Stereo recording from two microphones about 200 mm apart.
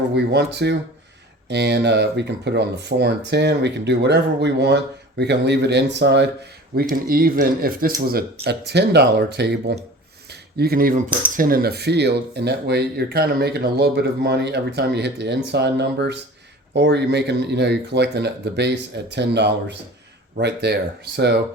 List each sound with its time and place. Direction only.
0.3 s speech: 55° right (ahead or behind)
6.9 s speech: 45° right (ahead or behind)
8.4 s speech: 55° right (ahead or behind)